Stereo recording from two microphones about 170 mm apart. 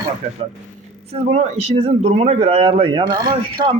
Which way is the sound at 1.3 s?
40° right (ahead or behind).